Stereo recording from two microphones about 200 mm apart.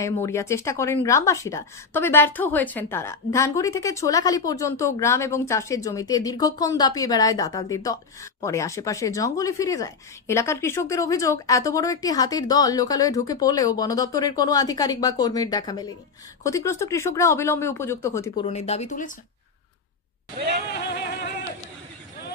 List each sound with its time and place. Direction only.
0.0 s a woman's voice: 15° left (ahead or behind)
18.4 s speech: 35° left (ahead or behind)
20.9 s music: 50° left (ahead or behind)